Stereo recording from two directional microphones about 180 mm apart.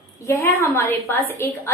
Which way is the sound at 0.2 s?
15° left (ahead or behind).